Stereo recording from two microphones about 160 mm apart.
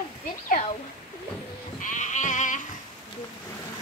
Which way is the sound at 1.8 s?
50° left (ahead or behind).